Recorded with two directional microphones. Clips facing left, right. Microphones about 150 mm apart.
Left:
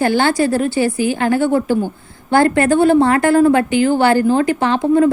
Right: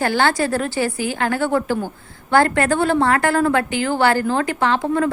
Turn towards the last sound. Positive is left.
turn(degrees=20)  # may be behind; listen again after turning